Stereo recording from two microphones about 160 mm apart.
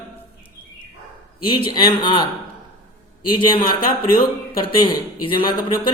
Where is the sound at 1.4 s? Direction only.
30° left (ahead or behind).